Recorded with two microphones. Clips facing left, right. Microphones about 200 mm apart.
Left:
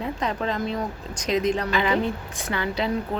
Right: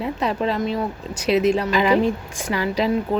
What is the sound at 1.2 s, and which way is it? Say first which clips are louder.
Speech: right 5 dB; 10° right (ahead or behind).